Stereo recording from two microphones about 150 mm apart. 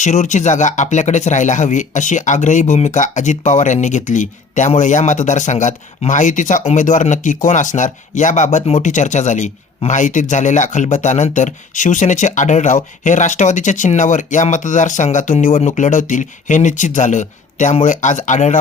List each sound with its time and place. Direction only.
0.0 s speech: 55° left (ahead or behind)